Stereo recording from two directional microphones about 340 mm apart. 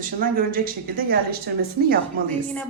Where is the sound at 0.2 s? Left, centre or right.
Right.